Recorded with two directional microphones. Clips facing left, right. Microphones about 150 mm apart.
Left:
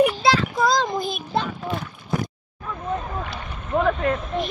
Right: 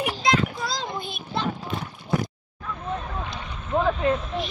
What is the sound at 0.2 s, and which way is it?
Child singing, 35° left (ahead or behind).